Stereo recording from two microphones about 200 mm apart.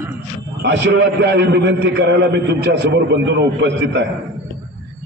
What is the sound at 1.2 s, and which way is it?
Speech, 55° right (ahead or behind).